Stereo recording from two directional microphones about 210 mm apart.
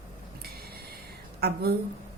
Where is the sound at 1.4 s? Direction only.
50° right (ahead or behind).